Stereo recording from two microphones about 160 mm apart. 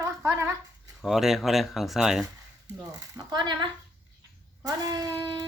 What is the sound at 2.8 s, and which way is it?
Speech, 20° right (ahead or behind).